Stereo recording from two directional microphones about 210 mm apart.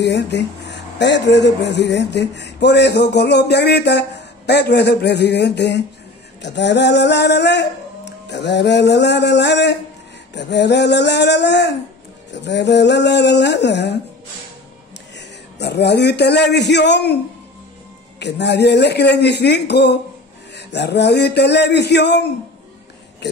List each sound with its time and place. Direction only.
0.0 s speech: 55° left (ahead or behind)
15.1 s a man's voice: 55° left (ahead or behind)
18.2 s speech: 55° left (ahead or behind)